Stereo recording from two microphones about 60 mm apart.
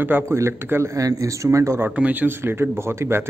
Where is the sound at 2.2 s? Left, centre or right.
Right.